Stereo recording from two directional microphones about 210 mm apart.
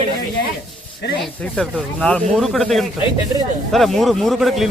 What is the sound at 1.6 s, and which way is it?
Speech, 5° left (ahead or behind).